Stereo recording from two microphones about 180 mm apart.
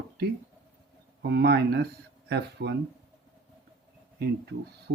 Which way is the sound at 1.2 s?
70° right (ahead or behind).